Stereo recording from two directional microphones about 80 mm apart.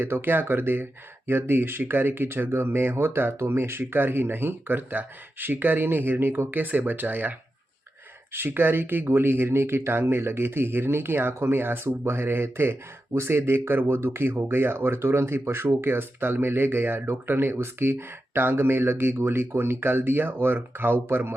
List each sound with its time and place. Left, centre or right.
0.0 s speech: right